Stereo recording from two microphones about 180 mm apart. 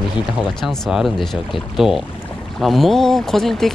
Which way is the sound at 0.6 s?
Centre (ahead or behind).